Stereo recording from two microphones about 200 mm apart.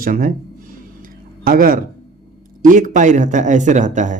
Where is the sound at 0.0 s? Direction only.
40° right (ahead or behind).